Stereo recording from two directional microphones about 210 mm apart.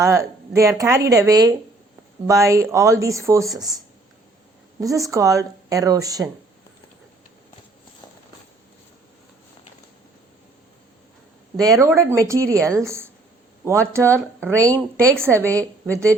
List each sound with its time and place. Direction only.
0.0 s speech: 15° right (ahead or behind)
4.8 s speech: 15° right (ahead or behind)
11.5 s a woman's voice: 15° right (ahead or behind)